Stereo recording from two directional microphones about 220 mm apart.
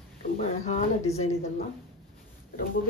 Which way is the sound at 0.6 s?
30° left (ahead or behind).